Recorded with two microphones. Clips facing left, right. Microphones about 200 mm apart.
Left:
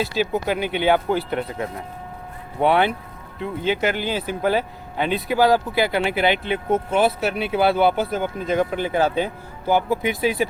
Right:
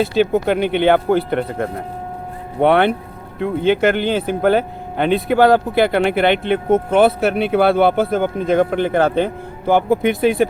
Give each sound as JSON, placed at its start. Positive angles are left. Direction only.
{"t": 0.0, "sound": "speech", "side_deg": -55}